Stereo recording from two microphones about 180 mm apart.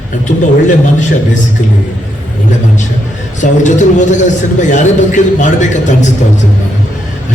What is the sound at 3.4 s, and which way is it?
A man's voice, 40° left (ahead or behind).